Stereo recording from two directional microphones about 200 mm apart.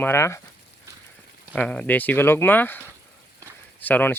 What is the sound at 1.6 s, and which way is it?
Speech, 5° left (ahead or behind).